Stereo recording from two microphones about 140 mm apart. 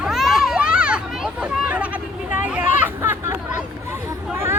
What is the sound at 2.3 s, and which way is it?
Chatter, 10° right (ahead or behind).